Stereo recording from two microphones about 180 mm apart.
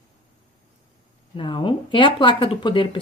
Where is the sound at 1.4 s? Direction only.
30° left (ahead or behind).